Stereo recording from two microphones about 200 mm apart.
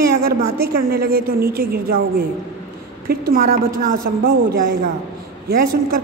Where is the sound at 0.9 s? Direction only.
50° right (ahead or behind).